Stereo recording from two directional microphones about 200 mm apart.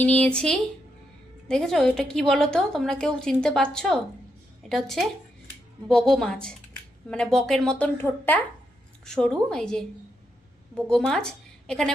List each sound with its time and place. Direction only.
0.0 s a woman's voice: 5° left (ahead or behind)